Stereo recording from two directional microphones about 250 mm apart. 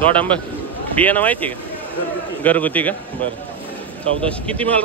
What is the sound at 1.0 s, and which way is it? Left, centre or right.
Speech, centre.